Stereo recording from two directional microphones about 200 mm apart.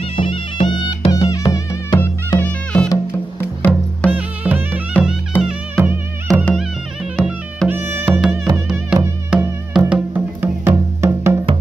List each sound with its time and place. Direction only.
0.0 s music: 30° left (ahead or behind)
2.4 s music: 5° left (ahead or behind)
4.1 s music: 5° right (ahead or behind)